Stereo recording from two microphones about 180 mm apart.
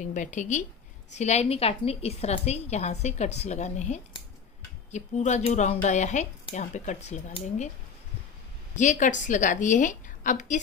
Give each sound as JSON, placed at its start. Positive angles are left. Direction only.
{"t": 0.0, "sound": "a woman's voice", "side_deg": 45}
{"t": 8.7, "sound": "a woman's voice", "side_deg": 45}